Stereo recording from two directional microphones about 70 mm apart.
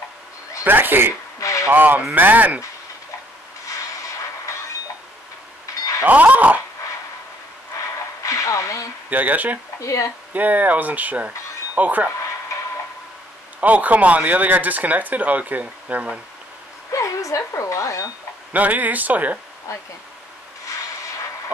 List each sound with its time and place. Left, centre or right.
0.7 s speech: right
1.4 s radio: left
1.7 s speech: right
6.0 s speech: right
7.7 s a sound: left
9.1 s speech: right
9.8 s speech: left
10.3 s speech: right
13.6 s speech: right
16.9 s speech: left
18.5 s speech: right
19.7 s speech: left